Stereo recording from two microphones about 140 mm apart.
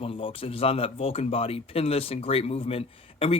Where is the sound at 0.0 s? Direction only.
40° left (ahead or behind).